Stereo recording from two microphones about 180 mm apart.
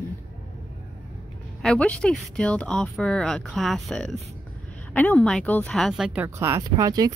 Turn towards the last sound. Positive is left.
turn(degrees=-20)  # may be behind; listen again after turning